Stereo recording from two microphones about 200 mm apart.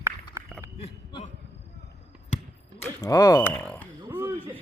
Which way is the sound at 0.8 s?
30° left (ahead or behind).